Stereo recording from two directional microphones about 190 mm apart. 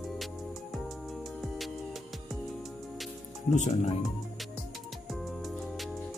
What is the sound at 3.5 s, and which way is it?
Speech, 35° left (ahead or behind).